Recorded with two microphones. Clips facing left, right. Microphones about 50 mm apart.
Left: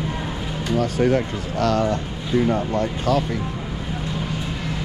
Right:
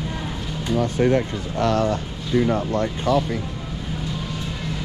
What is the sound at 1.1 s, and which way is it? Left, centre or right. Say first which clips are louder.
Speech: even; right.